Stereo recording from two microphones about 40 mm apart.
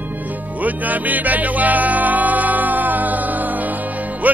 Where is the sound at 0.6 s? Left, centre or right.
Right.